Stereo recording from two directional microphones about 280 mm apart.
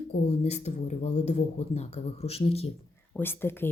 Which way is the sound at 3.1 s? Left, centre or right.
Centre.